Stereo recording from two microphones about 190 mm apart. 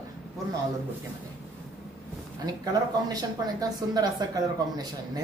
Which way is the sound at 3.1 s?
20° right (ahead or behind).